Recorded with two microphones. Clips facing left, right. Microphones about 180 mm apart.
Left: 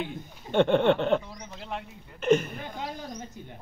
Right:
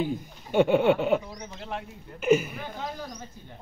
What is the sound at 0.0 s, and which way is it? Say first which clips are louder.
A man's voice: right 6 dB; 5° right (ahead or behind).